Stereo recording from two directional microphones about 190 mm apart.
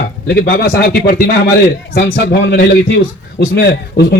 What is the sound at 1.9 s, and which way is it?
A man's voice, 65° left (ahead or behind).